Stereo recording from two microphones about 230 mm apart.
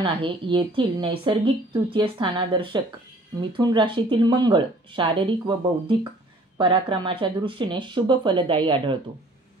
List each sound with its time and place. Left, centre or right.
0.0 s a woman's voice: right